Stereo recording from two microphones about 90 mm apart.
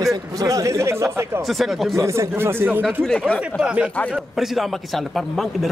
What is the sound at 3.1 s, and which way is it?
Speech, 10° left (ahead or behind).